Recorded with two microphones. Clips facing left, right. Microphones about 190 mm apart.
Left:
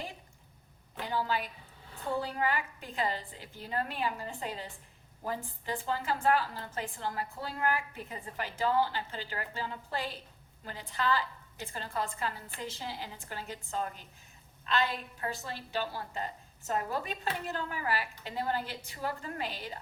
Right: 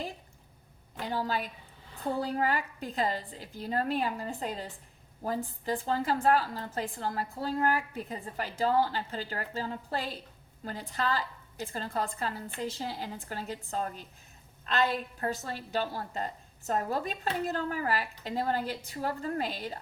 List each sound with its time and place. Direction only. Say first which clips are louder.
1.0 s a woman's voice: right 1 dB; 40° right (ahead or behind)